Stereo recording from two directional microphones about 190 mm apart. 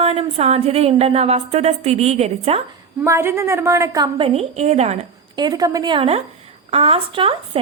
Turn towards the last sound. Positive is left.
turn(degrees=-30)  # may be behind; listen again after turning